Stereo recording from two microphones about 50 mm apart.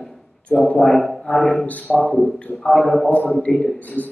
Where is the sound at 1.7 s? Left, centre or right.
Left.